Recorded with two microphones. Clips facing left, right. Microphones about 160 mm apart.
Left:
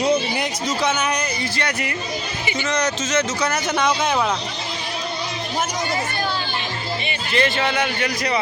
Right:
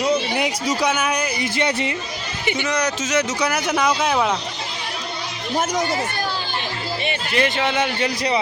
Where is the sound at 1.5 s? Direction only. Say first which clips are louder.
Right 4 dB; 20° right (ahead or behind); by 4.3 s 5° right (ahead or behind).